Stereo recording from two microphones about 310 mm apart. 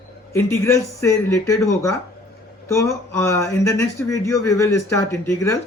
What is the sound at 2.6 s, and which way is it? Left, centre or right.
Speech, centre.